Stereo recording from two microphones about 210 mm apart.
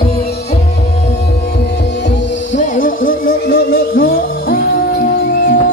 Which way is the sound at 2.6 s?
40° left (ahead or behind).